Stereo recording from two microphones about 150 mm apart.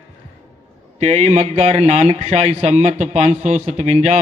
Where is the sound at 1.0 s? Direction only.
50° right (ahead or behind).